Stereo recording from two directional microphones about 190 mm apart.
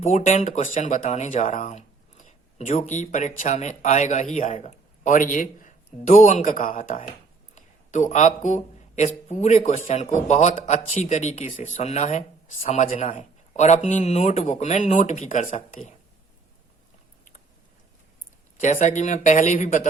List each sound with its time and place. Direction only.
0.0 s speech: 40° left (ahead or behind)
18.6 s speech: 40° left (ahead or behind)